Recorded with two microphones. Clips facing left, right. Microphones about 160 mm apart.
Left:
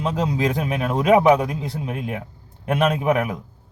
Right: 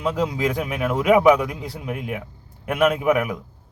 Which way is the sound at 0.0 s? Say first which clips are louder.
Even; 25° left (ahead or behind).